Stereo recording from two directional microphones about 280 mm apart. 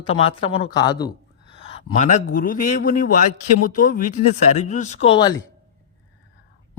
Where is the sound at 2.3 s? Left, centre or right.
Left.